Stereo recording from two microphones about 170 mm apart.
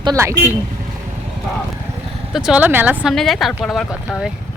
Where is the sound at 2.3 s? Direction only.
5° right (ahead or behind).